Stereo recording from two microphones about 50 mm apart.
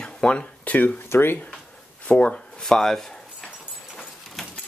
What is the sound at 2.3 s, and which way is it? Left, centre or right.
Speech, centre.